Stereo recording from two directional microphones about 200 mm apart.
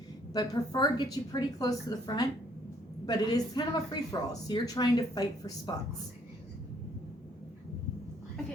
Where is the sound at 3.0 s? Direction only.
20° left (ahead or behind).